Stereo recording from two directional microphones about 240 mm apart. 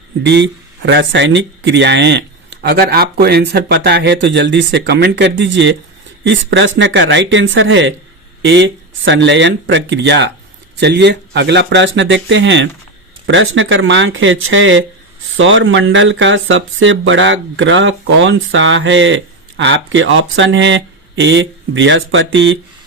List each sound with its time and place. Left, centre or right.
0.2 s speech: right